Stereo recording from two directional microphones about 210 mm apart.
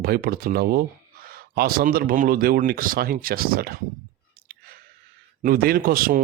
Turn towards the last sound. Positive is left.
turn(degrees=-45)  # may be behind; listen again after turning